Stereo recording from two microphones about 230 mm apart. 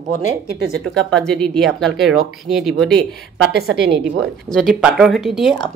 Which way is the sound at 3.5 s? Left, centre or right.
Right.